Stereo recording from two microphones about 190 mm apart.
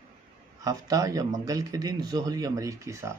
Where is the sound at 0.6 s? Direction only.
20° right (ahead or behind).